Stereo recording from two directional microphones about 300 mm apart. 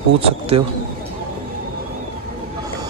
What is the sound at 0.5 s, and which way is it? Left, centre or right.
Speech, centre.